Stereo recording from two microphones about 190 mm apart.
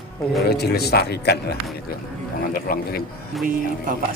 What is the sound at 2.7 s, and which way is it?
Speech, 50° left (ahead or behind).